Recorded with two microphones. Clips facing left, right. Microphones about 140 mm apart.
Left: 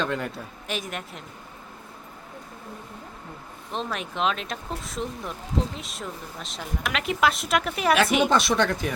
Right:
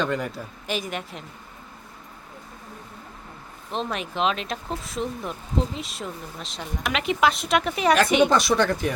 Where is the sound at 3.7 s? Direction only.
Centre (ahead or behind).